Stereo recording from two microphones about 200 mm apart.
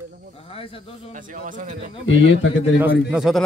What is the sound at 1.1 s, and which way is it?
Speech, 40° right (ahead or behind).